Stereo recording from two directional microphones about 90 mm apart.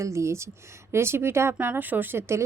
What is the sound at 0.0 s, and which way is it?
A woman's voice, 35° right (ahead or behind).